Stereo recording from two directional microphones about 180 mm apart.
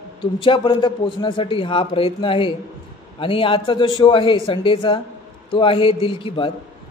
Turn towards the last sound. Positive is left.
turn(degrees=30)  # may be behind; listen again after turning